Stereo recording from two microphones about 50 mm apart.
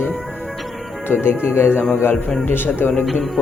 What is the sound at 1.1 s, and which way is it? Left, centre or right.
Speech, left.